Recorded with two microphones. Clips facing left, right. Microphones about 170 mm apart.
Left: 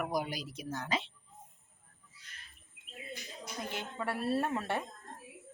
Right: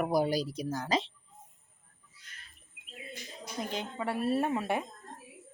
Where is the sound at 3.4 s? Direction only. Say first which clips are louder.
Right 5 dB; 20° right (ahead or behind).